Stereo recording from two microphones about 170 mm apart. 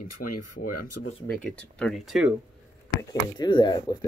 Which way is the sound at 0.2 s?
70° left (ahead or behind).